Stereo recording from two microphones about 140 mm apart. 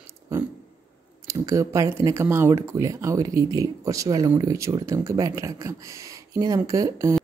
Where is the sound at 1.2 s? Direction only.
20° right (ahead or behind).